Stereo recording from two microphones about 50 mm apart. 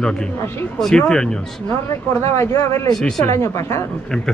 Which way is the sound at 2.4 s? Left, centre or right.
Left.